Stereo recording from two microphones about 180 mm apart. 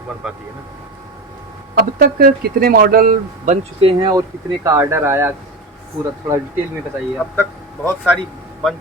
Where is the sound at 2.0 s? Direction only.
55° right (ahead or behind); by 5.3 s 15° right (ahead or behind).